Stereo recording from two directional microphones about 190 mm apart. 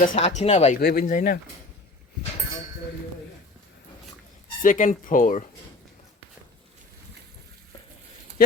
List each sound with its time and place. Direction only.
0.0 s speech: 45° left (ahead or behind)
0.3 s speech: 35° left (ahead or behind)
0.8 s speech: 50° left (ahead or behind)
4.6 s speech: 45° left (ahead or behind)